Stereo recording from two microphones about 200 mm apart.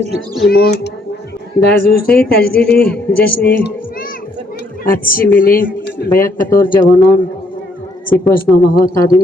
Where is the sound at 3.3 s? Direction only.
55° left (ahead or behind).